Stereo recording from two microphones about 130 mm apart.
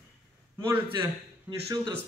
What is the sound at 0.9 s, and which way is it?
Speech, 40° right (ahead or behind).